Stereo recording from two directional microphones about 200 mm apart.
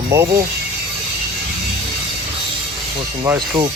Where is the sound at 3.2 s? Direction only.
20° right (ahead or behind).